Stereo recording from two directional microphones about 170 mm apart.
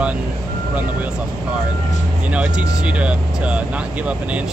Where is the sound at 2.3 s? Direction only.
5° right (ahead or behind).